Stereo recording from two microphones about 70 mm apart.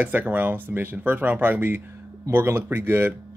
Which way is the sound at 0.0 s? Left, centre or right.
Right.